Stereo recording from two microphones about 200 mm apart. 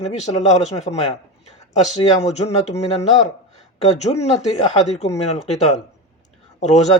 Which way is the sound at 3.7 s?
35° left (ahead or behind).